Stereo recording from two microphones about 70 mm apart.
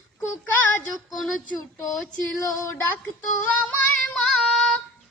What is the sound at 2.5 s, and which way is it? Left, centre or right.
Speech, left.